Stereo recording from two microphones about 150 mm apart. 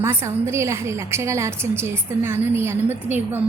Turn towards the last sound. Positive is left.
turn(degrees=-15)  # may be behind; listen again after turning